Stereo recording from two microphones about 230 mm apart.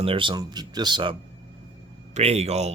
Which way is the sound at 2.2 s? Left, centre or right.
Right.